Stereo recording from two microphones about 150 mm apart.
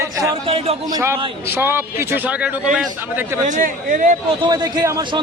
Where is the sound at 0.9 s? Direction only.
20° right (ahead or behind).